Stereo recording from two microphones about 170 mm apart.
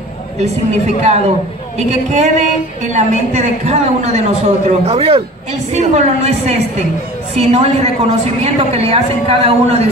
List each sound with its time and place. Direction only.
1.0 s a woman's voice: 40° right (ahead or behind)